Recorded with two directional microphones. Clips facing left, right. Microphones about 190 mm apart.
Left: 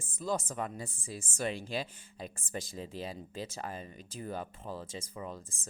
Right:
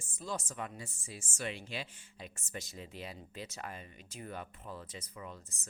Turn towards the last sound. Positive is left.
turn(degrees=35)  # may be behind; listen again after turning